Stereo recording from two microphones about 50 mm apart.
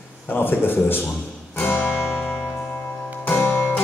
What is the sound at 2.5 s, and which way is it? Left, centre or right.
Music, left.